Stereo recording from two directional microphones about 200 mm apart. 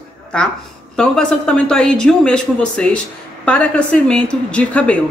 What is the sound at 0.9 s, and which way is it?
A woman's voice, 5° left (ahead or behind).